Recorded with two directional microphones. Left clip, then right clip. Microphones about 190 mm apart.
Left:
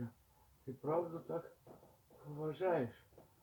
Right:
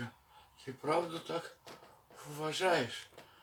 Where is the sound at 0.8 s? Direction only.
15° right (ahead or behind).